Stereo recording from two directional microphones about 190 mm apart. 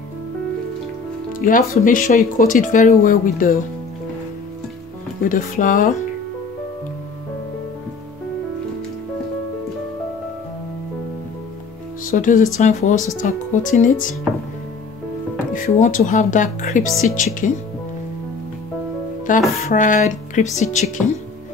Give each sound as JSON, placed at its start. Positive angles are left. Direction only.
{"t": 1.4, "sound": "speech", "side_deg": 45}
{"t": 5.3, "sound": "speech", "side_deg": 45}
{"t": 12.0, "sound": "speech", "side_deg": 45}
{"t": 15.5, "sound": "speech", "side_deg": 45}
{"t": 19.3, "sound": "speech", "side_deg": 45}